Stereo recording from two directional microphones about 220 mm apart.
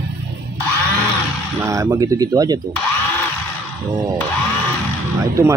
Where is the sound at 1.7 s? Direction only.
15° right (ahead or behind).